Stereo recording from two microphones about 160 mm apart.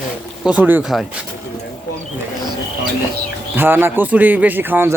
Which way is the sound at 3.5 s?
10° right (ahead or behind).